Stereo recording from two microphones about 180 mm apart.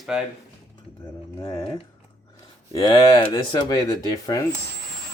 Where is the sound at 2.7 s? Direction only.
25° left (ahead or behind).